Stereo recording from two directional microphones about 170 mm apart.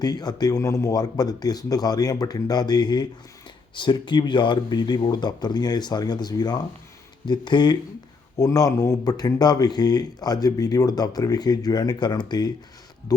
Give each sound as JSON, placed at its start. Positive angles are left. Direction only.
{"t": 0.0, "sound": "speech", "side_deg": 25}